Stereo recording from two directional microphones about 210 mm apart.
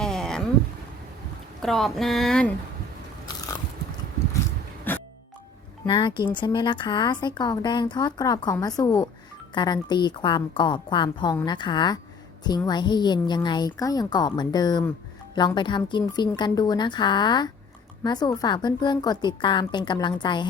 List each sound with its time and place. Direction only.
0.0 s a sound: 5° left (ahead or behind)
1.6 s speech: centre (ahead or behind)
3.2 s biting: 20° left (ahead or behind)
4.9 s music: 10° left (ahead or behind)
5.8 s speech: 25° left (ahead or behind)